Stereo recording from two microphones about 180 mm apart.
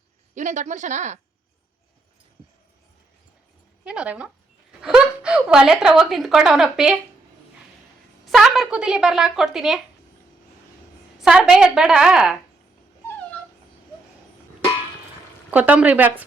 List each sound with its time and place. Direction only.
0.3 s speech: 40° right (ahead or behind)
3.8 s a woman's voice: 5° right (ahead or behind)
8.2 s speech: centre (ahead or behind)
11.2 s speech: 5° right (ahead or behind)
15.4 s speech: 10° right (ahead or behind)